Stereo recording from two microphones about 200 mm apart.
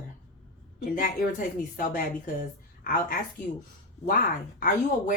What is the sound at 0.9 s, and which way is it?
A woman's voice, 40° left (ahead or behind).